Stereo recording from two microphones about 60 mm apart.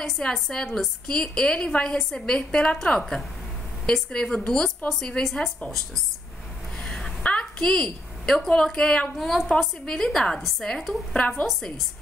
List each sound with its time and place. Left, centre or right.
0.3 s a woman's voice: centre
6.8 s a woman's voice: centre
11.1 s a woman's voice: left
11.4 s a woman's voice: centre